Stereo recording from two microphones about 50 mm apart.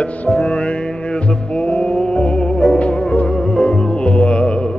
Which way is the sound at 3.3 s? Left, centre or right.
Centre.